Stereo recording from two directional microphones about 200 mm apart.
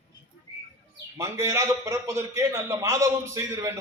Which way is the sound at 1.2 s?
15° right (ahead or behind).